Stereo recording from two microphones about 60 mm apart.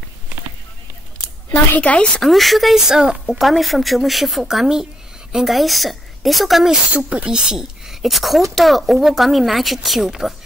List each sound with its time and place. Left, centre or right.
1.5 s a woman's voice: left
2.2 s a woman's voice: centre
6.7 s speech: centre